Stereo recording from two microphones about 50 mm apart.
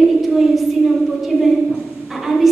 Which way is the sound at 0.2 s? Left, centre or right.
Centre.